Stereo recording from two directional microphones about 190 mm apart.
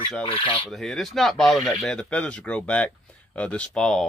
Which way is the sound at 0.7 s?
Centre (ahead or behind).